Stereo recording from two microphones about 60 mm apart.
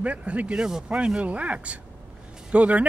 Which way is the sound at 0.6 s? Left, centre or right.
Centre.